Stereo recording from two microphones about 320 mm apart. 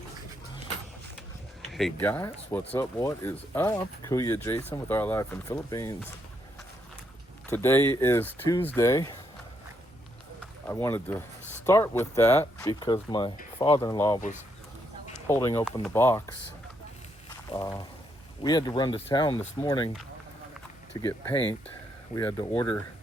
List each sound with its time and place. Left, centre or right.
1.7 s speech: centre
7.5 s speech: centre
10.7 s speech: centre
14.2 s speech: left
15.3 s speech: centre
17.5 s speech: centre
21.0 s speech: centre